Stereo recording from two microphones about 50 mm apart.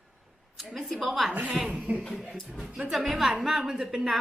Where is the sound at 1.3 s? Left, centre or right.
Right.